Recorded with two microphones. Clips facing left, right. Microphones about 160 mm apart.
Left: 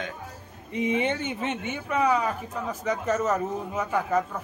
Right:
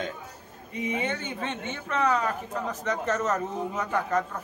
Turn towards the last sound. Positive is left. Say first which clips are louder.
# left 2 dB
turn(degrees=5)  # may be behind; listen again after turning